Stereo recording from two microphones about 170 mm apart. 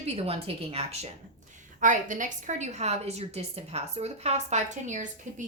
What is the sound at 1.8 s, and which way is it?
A woman's voice, 50° right (ahead or behind).